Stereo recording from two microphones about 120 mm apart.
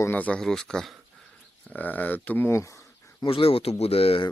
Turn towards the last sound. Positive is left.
turn(degrees=50)  # may be behind; listen again after turning